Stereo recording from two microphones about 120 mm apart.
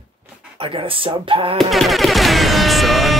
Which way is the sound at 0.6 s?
50° right (ahead or behind).